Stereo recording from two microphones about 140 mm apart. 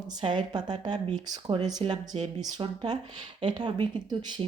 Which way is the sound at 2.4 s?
30° right (ahead or behind).